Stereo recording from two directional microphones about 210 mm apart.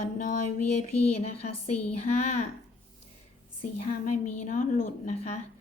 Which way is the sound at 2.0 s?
30° left (ahead or behind).